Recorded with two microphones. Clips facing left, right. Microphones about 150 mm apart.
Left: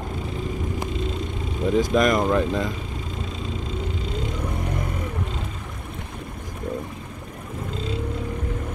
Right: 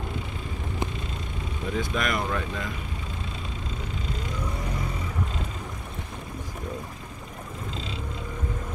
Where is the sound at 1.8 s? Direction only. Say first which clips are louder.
Left 8 dB; 40° left (ahead or behind).